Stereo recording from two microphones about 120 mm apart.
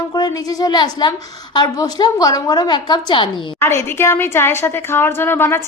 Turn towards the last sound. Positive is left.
turn(degrees=20)  # may be behind; listen again after turning